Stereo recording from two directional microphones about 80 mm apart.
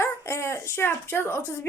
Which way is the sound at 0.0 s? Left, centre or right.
Left.